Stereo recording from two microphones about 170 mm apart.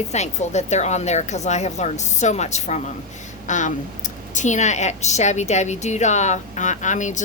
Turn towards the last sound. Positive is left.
turn(degrees=45)  # may be behind; listen again after turning